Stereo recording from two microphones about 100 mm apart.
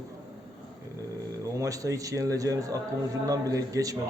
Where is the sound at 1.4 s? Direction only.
35° right (ahead or behind).